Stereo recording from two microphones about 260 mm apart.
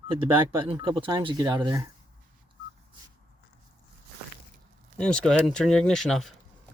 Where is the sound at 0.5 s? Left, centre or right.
Centre.